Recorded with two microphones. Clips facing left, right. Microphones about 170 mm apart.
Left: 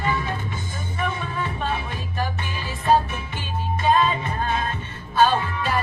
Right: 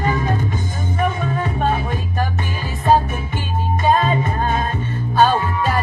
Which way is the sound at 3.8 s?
45° right (ahead or behind).